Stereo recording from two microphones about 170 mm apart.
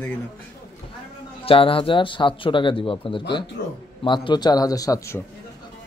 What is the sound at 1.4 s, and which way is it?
A man's voice, 35° left (ahead or behind).